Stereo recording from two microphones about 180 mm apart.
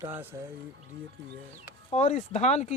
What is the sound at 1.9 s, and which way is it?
Speech, 40° left (ahead or behind).